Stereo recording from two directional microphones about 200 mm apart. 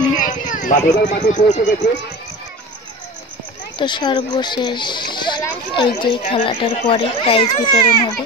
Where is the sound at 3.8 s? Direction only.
20° left (ahead or behind).